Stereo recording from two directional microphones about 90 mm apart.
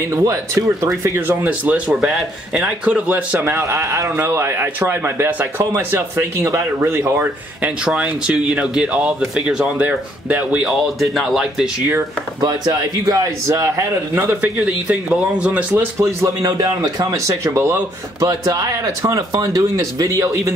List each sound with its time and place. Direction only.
0.1 s speech: 40° right (ahead or behind)
1.0 s speech: 25° right (ahead or behind)
2.0 s a man's voice: 5° right (ahead or behind)
3.3 s speech: 25° right (ahead or behind)
7.8 s a man's voice: 10° right (ahead or behind)
9.8 s a man's voice: 20° right (ahead or behind)
10.6 s speech: centre (ahead or behind)
12.4 s speech: 45° right (ahead or behind)
14.1 s a man's voice: 15° right (ahead or behind)
15.7 s speech: 30° right (ahead or behind)
18.2 s speech: 45° right (ahead or behind)